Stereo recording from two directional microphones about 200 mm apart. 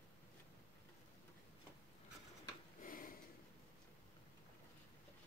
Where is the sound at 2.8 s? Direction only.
45° left (ahead or behind).